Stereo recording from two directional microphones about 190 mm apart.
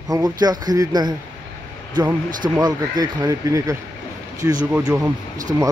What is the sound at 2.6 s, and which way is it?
Speech, 20° right (ahead or behind).